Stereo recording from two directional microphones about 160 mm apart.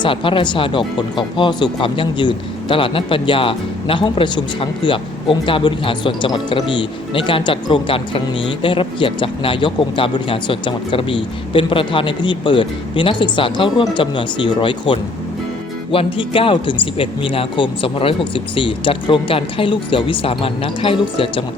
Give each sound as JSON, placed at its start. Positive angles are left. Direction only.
{"t": 0.0, "sound": "speech", "side_deg": 30}